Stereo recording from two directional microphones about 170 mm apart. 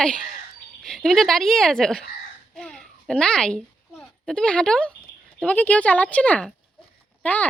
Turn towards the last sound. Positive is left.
turn(degrees=10)  # may be behind; listen again after turning